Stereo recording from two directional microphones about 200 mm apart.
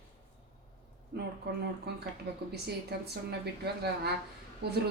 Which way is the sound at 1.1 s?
55° right (ahead or behind).